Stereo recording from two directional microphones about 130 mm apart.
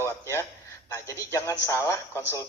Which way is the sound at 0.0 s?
20° left (ahead or behind).